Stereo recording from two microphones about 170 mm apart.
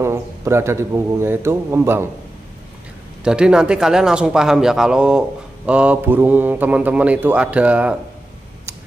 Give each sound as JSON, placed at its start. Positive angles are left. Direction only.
{"t": 0.0, "sound": "a man's voice", "side_deg": -15}
{"t": 3.3, "sound": "speech", "side_deg": -5}